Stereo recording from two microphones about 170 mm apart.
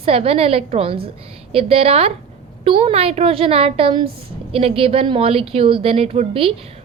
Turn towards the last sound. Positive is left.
turn(degrees=-35)  # may be behind; listen again after turning